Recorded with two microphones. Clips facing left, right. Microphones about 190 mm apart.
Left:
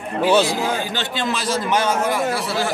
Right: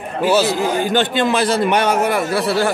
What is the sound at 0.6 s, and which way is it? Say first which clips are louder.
A man's voice: right 6 dB; 55° right (ahead or behind).